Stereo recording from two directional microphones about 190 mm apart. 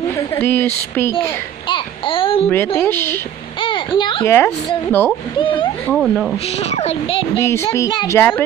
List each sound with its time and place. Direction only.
0.4 s speech: 10° left (ahead or behind)
1.7 s a sound: 25° left (ahead or behind)
2.5 s speech: 10° left (ahead or behind)
3.6 s a child's voice: 25° left (ahead or behind)
4.3 s speech: 10° left (ahead or behind)
5.4 s speech: 25° left (ahead or behind)
5.9 s speech: centre (ahead or behind)
6.6 s speech: 35° left (ahead or behind)
7.3 s speech: 15° left (ahead or behind)